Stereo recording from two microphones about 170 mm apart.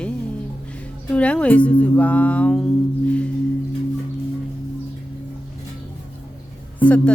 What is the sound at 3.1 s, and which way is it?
Singing bowl, 5° left (ahead or behind).